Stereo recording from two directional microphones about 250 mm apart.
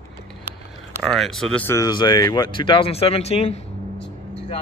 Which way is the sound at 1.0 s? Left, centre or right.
Centre.